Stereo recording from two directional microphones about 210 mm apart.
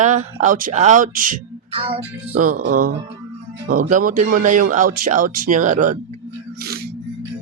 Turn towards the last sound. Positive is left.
turn(degrees=-35)  # may be behind; listen again after turning